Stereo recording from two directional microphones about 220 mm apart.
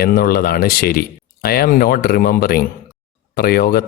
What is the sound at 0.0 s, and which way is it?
A man's voice, 45° left (ahead or behind).